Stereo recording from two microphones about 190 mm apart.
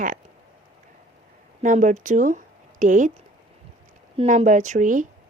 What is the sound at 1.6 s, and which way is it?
A woman's voice, 40° right (ahead or behind).